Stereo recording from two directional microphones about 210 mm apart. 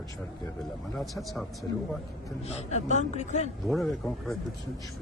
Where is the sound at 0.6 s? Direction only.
Centre (ahead or behind).